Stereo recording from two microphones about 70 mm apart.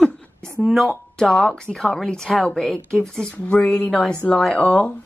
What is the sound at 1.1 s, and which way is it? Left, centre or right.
A woman's voice, centre.